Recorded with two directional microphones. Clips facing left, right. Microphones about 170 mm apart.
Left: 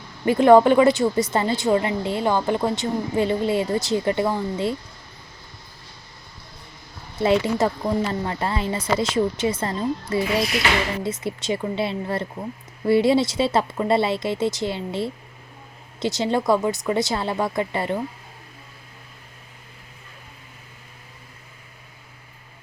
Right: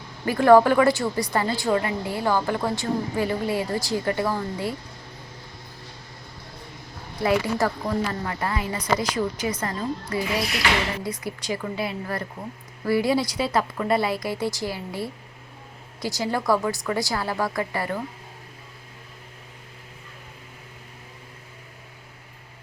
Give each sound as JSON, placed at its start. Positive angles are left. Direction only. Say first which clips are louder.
{"t": 0.3, "sound": "a woman's voice", "louder": "left 2 dB", "side_deg": 20}
{"t": 7.2, "sound": "a woman's voice", "louder": "left 3 dB", "side_deg": 25}